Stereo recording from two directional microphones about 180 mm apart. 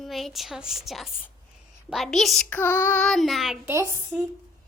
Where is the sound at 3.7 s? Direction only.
15° right (ahead or behind).